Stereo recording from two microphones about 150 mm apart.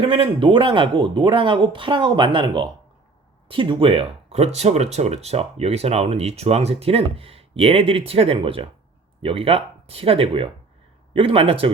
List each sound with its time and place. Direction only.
0.0 s speech: 40° right (ahead or behind)